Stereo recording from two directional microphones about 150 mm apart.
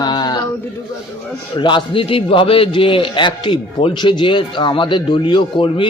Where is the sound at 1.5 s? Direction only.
30° left (ahead or behind).